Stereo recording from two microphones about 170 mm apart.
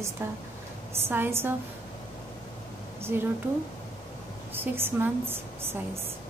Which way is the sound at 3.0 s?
15° right (ahead or behind).